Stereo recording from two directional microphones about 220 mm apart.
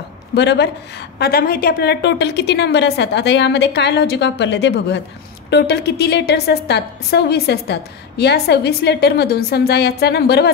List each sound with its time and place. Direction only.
0.3 s a woman's voice: 50° left (ahead or behind)